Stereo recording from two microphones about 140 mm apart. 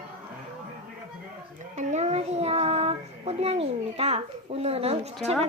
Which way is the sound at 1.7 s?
55° right (ahead or behind).